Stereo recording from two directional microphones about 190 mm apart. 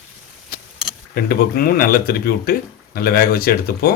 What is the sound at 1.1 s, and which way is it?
Cutlery, 50° left (ahead or behind).